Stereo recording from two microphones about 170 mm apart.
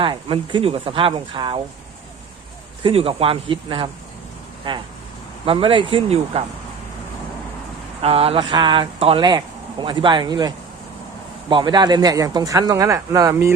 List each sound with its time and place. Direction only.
0.0 s speech: 30° right (ahead or behind)
2.8 s speech: 35° right (ahead or behind)
8.0 s speech: 35° right (ahead or behind); by 13.5 s 20° right (ahead or behind)